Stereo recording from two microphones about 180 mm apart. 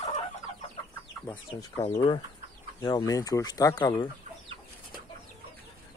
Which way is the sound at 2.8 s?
20° left (ahead or behind).